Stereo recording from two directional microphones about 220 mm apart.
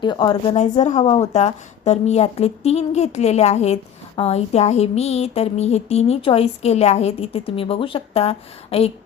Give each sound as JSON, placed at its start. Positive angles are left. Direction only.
{"t": 0.0, "sound": "speech", "side_deg": 20}